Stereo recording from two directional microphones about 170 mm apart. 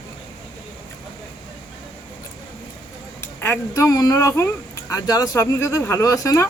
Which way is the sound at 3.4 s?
15° left (ahead or behind).